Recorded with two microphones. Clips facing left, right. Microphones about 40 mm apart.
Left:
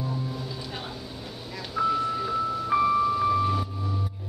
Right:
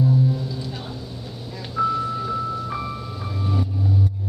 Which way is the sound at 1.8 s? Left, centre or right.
Centre.